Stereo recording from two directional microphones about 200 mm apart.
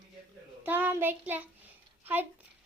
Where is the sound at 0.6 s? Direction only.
10° right (ahead or behind).